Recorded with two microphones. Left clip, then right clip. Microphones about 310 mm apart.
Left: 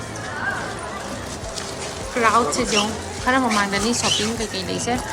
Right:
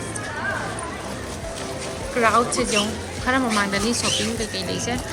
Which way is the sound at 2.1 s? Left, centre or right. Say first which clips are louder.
Left 1 dB; centre.